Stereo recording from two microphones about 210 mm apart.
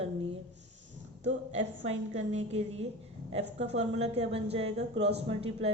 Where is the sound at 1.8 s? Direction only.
30° right (ahead or behind).